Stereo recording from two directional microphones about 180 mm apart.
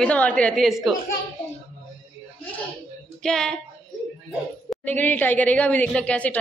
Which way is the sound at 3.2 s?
5° left (ahead or behind).